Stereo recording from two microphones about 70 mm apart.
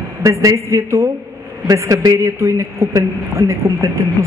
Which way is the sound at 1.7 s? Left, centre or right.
Right.